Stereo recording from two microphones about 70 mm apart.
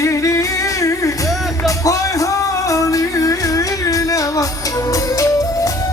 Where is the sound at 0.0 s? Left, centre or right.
Left.